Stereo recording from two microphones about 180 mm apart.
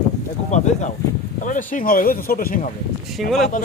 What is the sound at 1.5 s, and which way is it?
Speech, 45° left (ahead or behind).